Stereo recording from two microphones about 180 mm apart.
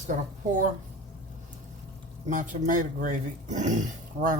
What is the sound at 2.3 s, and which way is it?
Speech, 45° right (ahead or behind).